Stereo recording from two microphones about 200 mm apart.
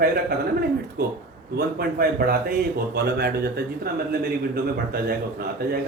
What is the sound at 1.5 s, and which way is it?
A man's voice, 50° right (ahead or behind).